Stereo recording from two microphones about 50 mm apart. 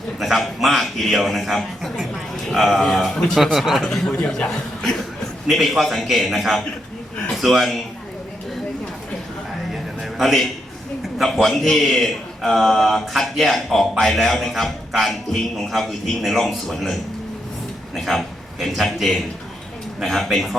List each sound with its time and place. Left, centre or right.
0.2 s a man's voice: centre
3.3 s a man's voice: centre
3.8 s a man's voice: centre
4.3 s a man's voice: centre
10.2 s a man's voice: centre